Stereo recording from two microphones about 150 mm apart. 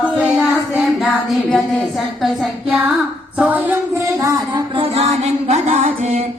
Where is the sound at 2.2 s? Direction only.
Centre (ahead or behind).